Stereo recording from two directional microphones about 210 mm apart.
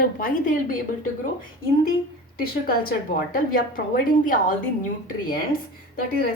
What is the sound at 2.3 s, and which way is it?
A woman's voice, 45° left (ahead or behind).